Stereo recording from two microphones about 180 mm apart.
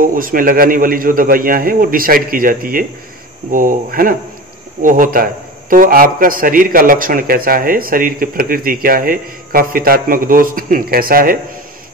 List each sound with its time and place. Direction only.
0.0 s speech: 50° right (ahead or behind)